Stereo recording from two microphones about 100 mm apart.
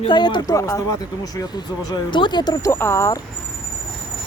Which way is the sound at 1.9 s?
55° left (ahead or behind).